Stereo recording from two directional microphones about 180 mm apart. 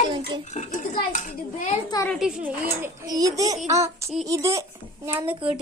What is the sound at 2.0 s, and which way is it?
Speech, centre (ahead or behind).